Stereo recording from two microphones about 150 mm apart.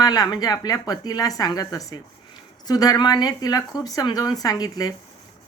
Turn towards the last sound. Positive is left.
turn(degrees=25)  # may be behind; listen again after turning